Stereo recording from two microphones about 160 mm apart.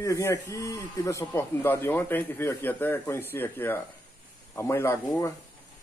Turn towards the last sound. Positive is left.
turn(degrees=15)  # may be behind; listen again after turning